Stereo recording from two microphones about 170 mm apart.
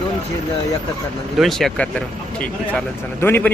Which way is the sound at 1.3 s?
Centre (ahead or behind).